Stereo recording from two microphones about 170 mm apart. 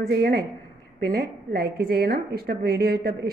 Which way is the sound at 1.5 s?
65° right (ahead or behind).